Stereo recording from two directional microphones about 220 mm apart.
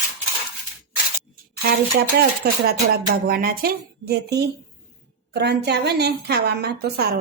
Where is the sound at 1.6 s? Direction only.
45° right (ahead or behind).